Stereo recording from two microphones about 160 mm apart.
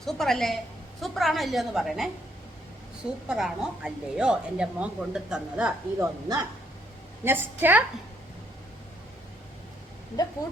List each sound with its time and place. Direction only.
0.0 s a woman's voice: centre (ahead or behind)
6.0 s speech: 25° right (ahead or behind)
7.3 s a woman's voice: 15° right (ahead or behind)